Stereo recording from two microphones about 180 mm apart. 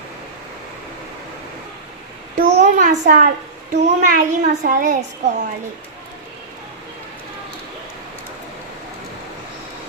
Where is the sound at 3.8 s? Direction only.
45° right (ahead or behind).